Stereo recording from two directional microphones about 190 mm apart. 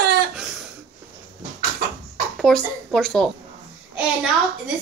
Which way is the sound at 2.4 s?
Centre (ahead or behind).